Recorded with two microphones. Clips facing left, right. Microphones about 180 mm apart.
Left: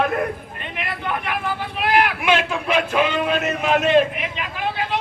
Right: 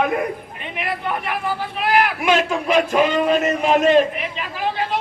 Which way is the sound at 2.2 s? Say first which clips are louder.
Right 2 dB; 45° right (ahead or behind).